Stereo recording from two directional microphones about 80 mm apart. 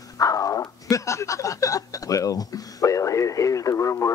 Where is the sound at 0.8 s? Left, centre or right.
Left.